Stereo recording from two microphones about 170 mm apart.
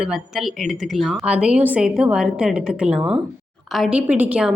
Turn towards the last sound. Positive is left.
turn(degrees=-5)  # may be behind; listen again after turning